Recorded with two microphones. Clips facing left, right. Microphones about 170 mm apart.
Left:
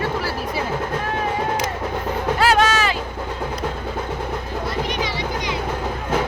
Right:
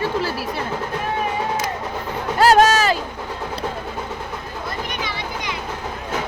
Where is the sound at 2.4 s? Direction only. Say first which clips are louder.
Right 5 dB; 40° right (ahead or behind).